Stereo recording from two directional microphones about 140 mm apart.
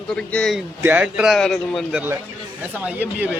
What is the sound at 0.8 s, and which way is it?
A man's voice, 10° right (ahead or behind).